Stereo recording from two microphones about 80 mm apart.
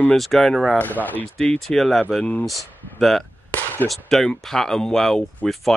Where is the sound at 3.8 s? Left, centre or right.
Centre.